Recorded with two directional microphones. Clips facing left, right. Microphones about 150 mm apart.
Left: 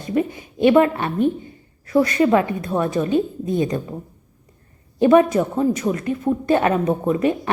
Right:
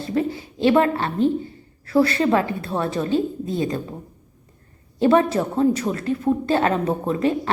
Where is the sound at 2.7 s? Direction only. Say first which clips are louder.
Left 2 dB; 15° left (ahead or behind).